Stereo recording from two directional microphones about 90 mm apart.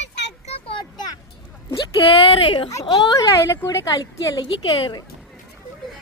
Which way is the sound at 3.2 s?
35° left (ahead or behind).